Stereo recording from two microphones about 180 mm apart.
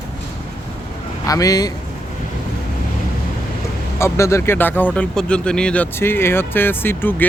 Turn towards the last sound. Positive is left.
turn(degrees=10)  # may be behind; listen again after turning